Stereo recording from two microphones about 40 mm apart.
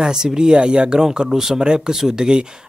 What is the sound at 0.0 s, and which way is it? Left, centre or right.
Speech, centre.